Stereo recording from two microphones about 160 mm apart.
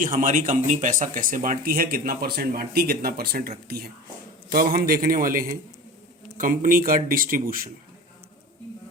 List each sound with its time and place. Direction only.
0.0 s speech: 55° right (ahead or behind)